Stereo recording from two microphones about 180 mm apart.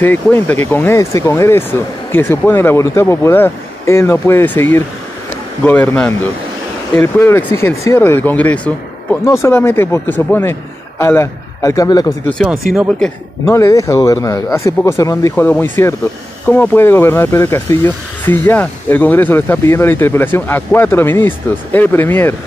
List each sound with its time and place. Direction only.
0.0 s a man's voice: 10° left (ahead or behind)
13.5 s speech: 15° left (ahead or behind)